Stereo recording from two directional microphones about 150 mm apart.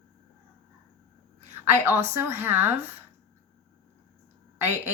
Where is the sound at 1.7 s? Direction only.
15° right (ahead or behind).